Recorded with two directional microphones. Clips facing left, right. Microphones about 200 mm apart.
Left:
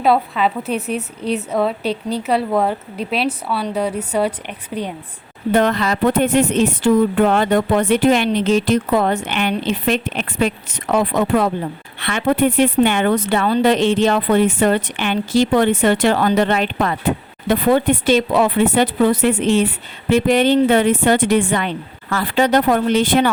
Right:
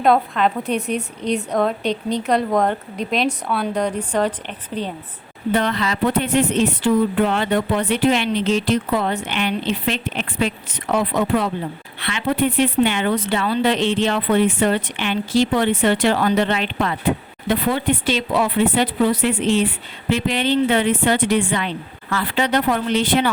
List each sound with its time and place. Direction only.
0.0 s a woman's voice: 5° left (ahead or behind)
5.5 s speech: 45° left (ahead or behind)